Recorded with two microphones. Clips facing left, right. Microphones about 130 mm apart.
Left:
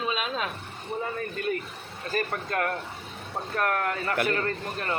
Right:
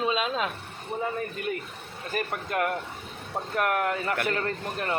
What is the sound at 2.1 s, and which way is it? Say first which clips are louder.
A man's voice: left 1 dB; 15° right (ahead or behind).